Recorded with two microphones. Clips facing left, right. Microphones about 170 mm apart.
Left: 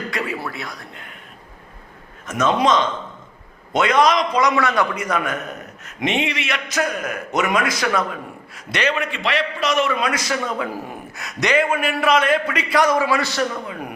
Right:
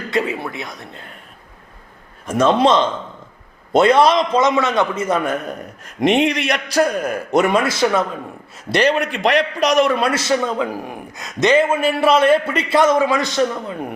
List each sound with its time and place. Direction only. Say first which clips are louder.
0.1 s a man's voice: right 5 dB; 25° right (ahead or behind)
2.2 s a man's voice: right 4 dB; 30° right (ahead or behind)